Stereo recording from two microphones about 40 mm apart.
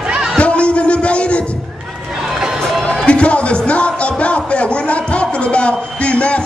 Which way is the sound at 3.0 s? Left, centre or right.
Left.